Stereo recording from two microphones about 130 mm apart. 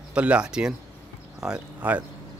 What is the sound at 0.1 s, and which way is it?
Speech, 10° right (ahead or behind).